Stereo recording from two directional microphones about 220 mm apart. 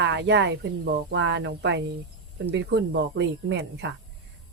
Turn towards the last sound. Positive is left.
turn(degrees=-50)  # may be behind; listen again after turning